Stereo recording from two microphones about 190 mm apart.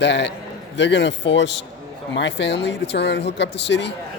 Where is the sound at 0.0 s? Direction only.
65° left (ahead or behind).